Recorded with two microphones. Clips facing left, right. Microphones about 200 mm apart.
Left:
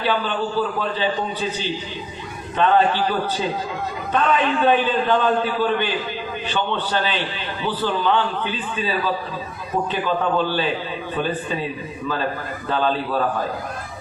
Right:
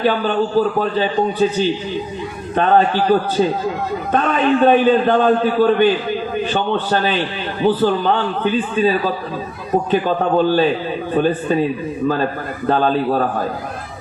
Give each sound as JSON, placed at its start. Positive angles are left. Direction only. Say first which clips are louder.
{"t": 0.0, "sound": "a man's voice", "louder": "right 6 dB", "side_deg": -45}
{"t": 12.6, "sound": "a man's voice", "louder": "right 6 dB", "side_deg": -45}